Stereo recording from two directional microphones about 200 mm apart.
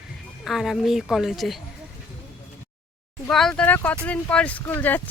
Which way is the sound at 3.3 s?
Centre (ahead or behind).